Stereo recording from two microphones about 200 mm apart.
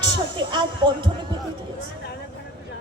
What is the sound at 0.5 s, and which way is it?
Speech, 25° right (ahead or behind).